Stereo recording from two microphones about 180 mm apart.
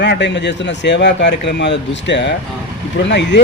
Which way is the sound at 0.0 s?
75° left (ahead or behind).